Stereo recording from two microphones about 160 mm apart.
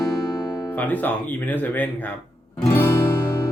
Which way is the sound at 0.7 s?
10° left (ahead or behind).